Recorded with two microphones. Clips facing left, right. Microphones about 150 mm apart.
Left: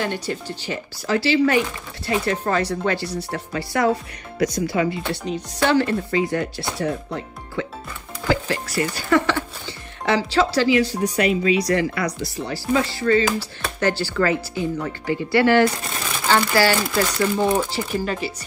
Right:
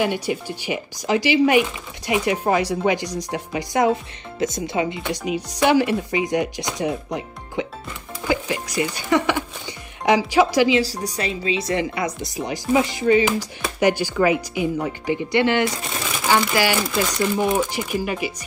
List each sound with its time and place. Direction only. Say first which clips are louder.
0.0 s speech: right 3 dB; 10° right (ahead or behind)
10.8 s speech: left 4 dB; 35° right (ahead or behind); by 15.9 s 20° right (ahead or behind)
16.0 s crumpling: even; 10° right (ahead or behind)
16.9 s speech: left 1 dB; 10° right (ahead or behind)